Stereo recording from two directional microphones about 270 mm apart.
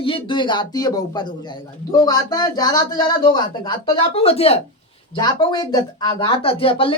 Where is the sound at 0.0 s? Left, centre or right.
Centre.